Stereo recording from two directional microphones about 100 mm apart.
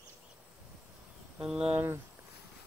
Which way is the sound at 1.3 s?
10° right (ahead or behind).